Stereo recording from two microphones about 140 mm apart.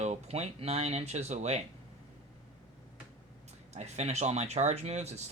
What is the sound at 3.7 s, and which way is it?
Speech, 50° right (ahead or behind).